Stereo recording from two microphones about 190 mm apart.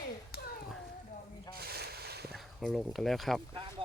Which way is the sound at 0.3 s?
55° left (ahead or behind).